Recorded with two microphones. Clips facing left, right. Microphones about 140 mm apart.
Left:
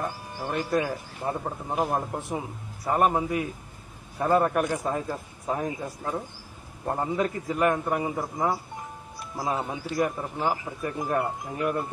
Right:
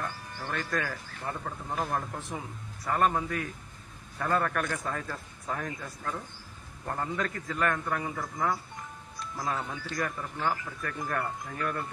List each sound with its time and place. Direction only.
0.0 s a man's voice: 15° left (ahead or behind)